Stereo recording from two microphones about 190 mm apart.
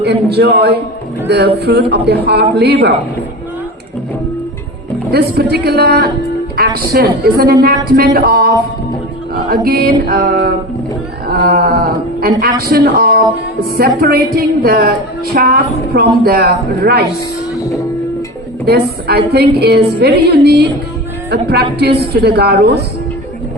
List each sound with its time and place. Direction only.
0.0 s a woman's voice: 60° right (ahead or behind)
5.1 s a woman's voice: 55° right (ahead or behind)
11.3 s a sound: 50° right (ahead or behind)
12.2 s a woman's voice: 50° right (ahead or behind)
17.5 s music: 15° left (ahead or behind)
18.6 s a woman's voice: 55° right (ahead or behind)